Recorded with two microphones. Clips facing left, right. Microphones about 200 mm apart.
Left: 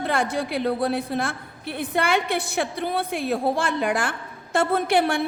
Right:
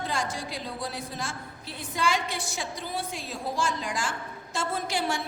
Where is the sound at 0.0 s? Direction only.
60° left (ahead or behind).